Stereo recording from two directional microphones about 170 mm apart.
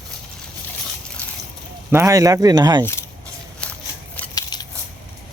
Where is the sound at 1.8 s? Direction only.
15° right (ahead or behind).